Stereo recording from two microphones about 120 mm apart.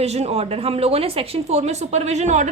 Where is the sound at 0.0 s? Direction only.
60° right (ahead or behind).